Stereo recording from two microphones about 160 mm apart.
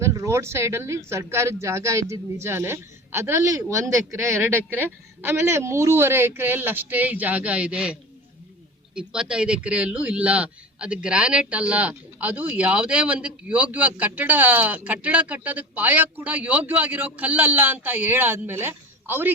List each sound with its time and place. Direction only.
0.0 s a man's voice: 20° right (ahead or behind)
9.0 s a man's voice: 5° right (ahead or behind)